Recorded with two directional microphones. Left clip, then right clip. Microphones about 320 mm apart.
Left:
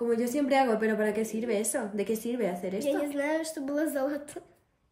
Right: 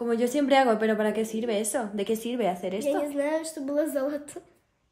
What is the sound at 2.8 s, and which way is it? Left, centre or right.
A woman's voice, centre.